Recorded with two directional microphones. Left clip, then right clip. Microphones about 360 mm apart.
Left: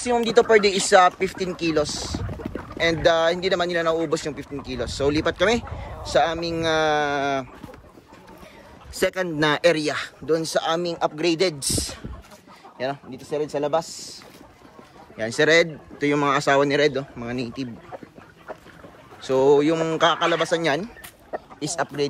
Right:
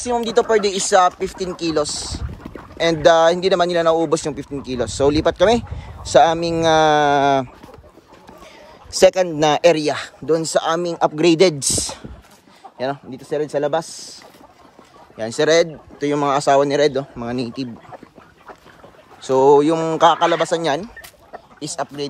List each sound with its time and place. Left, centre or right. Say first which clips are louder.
0.0 s speech: right 1 dB; centre
9.0 s speech: right 8 dB; centre
19.2 s speech: right 5 dB; centre